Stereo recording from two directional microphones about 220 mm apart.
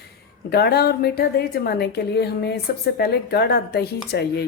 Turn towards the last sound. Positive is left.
turn(degrees=45)  # may be behind; listen again after turning